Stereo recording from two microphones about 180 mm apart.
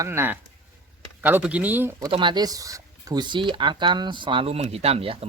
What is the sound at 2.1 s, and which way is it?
Speech, 25° right (ahead or behind).